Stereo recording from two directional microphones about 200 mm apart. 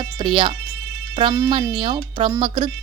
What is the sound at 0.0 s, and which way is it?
Speech, 25° right (ahead or behind).